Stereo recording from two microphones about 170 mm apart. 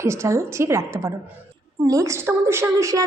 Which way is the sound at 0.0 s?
15° right (ahead or behind).